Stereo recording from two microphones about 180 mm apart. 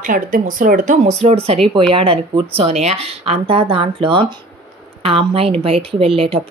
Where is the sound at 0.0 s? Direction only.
50° right (ahead or behind).